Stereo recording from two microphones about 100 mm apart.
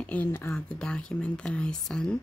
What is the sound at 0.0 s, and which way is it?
Speech, 15° left (ahead or behind).